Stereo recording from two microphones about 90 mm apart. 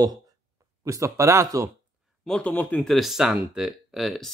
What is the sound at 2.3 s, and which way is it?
Speech, 15° left (ahead or behind).